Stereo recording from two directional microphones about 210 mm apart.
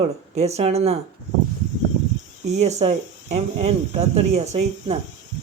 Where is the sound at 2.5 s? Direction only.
30° right (ahead or behind).